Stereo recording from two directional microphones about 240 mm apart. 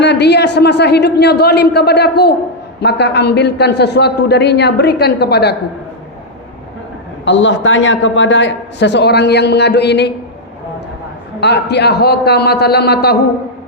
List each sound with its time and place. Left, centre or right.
0.0 s a man's voice: left
7.3 s a man's voice: left
11.3 s a man's voice: left